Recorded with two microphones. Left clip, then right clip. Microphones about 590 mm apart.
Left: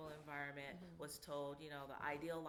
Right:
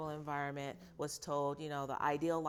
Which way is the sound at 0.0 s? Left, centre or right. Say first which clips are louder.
Right 10 dB; right.